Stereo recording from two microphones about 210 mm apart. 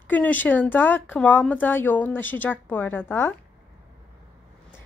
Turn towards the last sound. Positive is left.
turn(degrees=10)  # may be behind; listen again after turning